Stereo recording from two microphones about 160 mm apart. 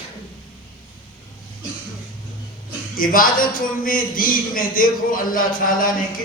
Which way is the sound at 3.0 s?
60° left (ahead or behind).